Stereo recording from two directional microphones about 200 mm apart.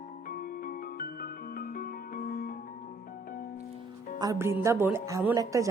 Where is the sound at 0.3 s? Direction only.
45° left (ahead or behind).